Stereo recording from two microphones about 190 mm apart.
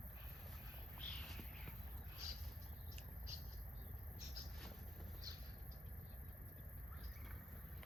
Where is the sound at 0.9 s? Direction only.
Centre (ahead or behind).